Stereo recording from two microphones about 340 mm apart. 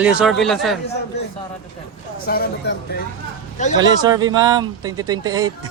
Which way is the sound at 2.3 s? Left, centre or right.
Left.